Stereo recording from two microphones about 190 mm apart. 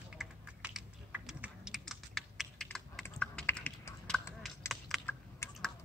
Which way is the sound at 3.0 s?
10° left (ahead or behind).